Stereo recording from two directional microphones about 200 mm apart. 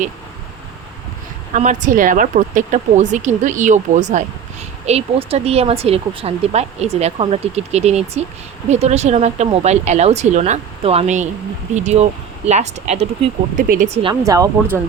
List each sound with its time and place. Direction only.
1.5 s speech: 40° right (ahead or behind); by 14.8 s 15° right (ahead or behind)